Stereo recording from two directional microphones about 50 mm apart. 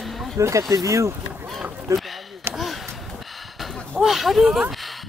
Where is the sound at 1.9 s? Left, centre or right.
Right.